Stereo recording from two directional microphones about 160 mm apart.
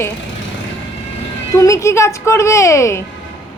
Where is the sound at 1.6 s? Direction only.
20° left (ahead or behind).